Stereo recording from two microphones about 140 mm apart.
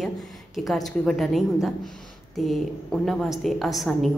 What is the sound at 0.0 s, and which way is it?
A woman's voice, centre (ahead or behind).